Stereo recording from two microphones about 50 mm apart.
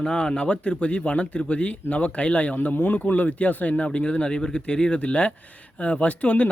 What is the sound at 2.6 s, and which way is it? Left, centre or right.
Speech, left.